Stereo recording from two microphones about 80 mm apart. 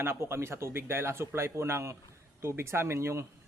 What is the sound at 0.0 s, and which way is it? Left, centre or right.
A man's voice, right.